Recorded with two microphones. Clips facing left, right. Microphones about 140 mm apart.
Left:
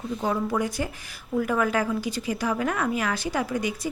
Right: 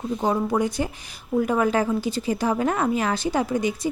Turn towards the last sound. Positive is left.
turn(degrees=-25)  # may be behind; listen again after turning